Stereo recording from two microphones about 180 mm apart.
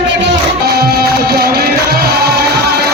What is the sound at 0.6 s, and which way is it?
Music, 60° right (ahead or behind).